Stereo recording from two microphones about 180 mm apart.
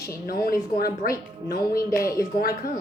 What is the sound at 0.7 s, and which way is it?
Speech, 55° left (ahead or behind).